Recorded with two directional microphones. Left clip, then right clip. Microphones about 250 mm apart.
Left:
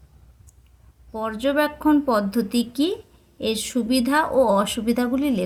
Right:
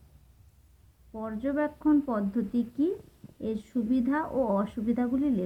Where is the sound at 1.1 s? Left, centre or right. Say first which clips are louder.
Left 10 dB; left.